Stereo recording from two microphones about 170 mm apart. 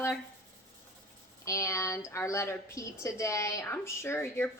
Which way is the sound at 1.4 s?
20° left (ahead or behind).